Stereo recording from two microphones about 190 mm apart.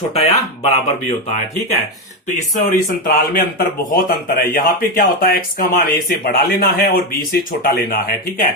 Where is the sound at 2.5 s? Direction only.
40° left (ahead or behind).